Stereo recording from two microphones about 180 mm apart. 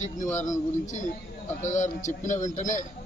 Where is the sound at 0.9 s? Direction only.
40° left (ahead or behind).